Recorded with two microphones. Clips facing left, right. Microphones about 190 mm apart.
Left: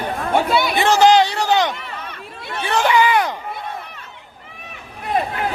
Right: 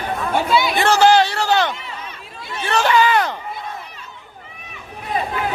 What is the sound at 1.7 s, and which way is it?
Chatter, 60° left (ahead or behind).